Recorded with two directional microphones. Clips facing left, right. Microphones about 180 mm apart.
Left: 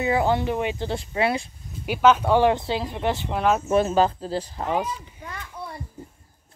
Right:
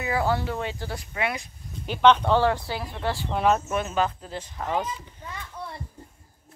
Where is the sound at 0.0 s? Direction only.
20° left (ahead or behind).